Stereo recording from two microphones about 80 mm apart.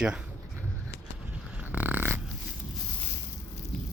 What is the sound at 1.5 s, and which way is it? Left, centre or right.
Dog, right.